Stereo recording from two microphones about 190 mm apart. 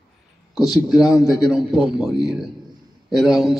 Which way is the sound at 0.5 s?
Centre (ahead or behind).